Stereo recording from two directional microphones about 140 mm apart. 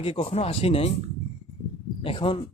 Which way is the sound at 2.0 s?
40° left (ahead or behind).